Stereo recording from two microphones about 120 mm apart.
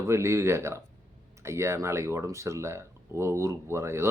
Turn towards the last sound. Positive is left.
turn(degrees=-20)  # may be behind; listen again after turning